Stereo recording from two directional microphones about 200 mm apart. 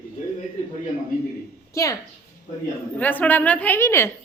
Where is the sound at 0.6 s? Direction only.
35° left (ahead or behind).